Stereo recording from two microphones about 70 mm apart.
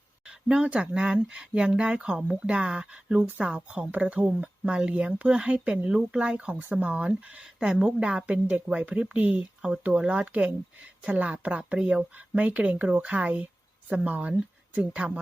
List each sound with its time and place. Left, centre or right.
0.3 s a woman's voice: centre